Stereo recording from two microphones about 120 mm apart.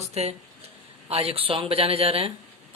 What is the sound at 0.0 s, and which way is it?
Speech, 65° right (ahead or behind).